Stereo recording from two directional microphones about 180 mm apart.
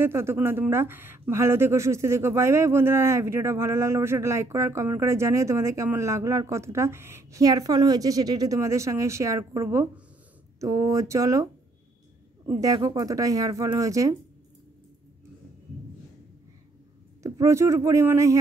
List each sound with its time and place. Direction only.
0.0 s speech: 15° right (ahead or behind)
12.5 s speech: 20° right (ahead or behind)
17.2 s speech: 15° right (ahead or behind)